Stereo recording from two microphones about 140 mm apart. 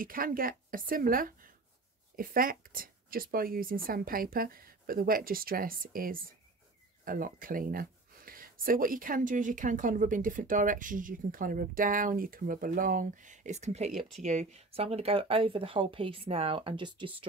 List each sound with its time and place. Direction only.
0.0 s speech: 90° right; by 17.1 s 35° right (ahead or behind)